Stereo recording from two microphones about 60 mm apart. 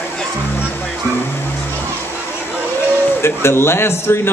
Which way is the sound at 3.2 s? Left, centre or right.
Left.